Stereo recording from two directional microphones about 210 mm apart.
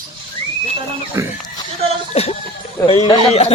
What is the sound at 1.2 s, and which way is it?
Speech, 15° right (ahead or behind).